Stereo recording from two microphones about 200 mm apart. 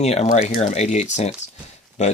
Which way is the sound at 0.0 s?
35° left (ahead or behind).